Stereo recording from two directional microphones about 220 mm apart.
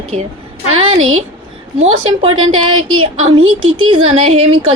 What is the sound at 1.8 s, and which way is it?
Speech, 25° right (ahead or behind).